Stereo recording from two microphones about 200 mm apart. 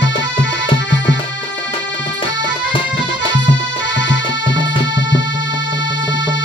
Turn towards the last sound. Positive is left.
turn(degrees=65)  # may be behind; listen again after turning